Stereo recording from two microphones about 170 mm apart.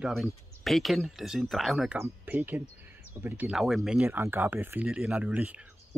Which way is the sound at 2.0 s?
15° right (ahead or behind).